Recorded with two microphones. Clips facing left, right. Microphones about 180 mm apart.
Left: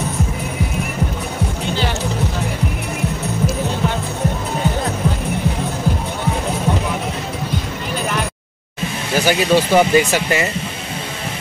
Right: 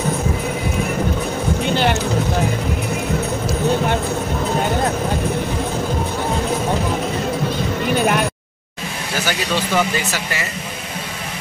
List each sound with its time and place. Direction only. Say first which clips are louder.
9.2 s speech: left 7 dB; 15° left (ahead or behind)